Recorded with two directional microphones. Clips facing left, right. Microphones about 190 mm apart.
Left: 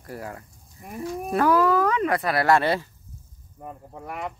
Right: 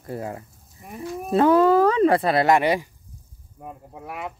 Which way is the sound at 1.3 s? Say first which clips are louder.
Right 4 dB; 25° right (ahead or behind).